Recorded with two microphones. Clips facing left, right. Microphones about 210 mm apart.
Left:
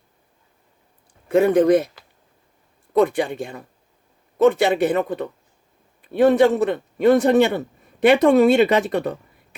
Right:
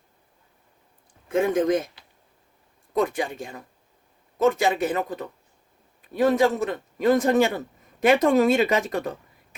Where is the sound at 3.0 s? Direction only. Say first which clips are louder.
Left 6 dB; 70° left (ahead or behind).